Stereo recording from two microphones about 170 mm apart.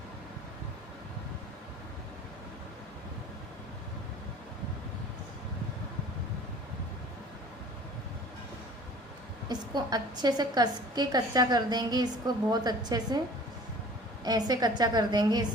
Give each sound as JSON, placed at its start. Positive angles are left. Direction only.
{"t": 9.5, "sound": "a woman's voice", "side_deg": -25}
{"t": 14.3, "sound": "a woman's voice", "side_deg": -25}